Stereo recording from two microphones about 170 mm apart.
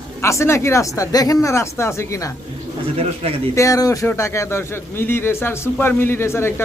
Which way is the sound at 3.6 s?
20° left (ahead or behind).